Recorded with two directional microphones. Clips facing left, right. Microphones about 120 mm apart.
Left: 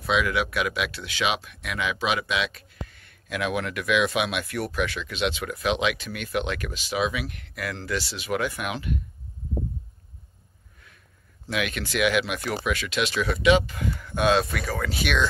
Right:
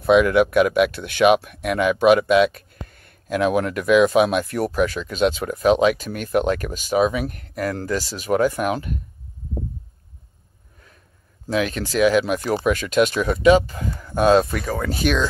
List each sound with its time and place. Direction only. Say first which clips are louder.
0.0 s speech: right 10 dB; 50° right (ahead or behind)
11.4 s speech: right 6 dB; 35° right (ahead or behind)